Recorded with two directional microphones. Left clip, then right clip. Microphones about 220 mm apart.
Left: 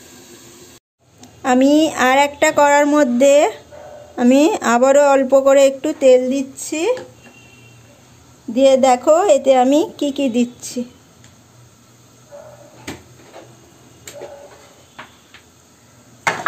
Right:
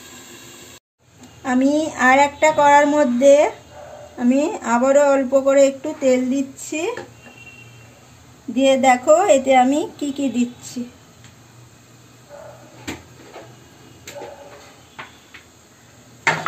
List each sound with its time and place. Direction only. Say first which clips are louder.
1.4 s speech: left 6 dB; 40° left (ahead or behind)
8.5 s a woman's voice: left 3 dB; 35° left (ahead or behind)